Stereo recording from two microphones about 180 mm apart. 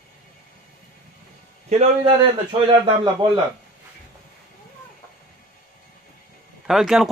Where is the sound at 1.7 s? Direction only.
35° right (ahead or behind).